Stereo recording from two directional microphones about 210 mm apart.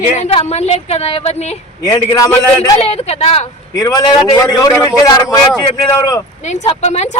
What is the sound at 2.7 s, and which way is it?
Speech, 30° left (ahead or behind).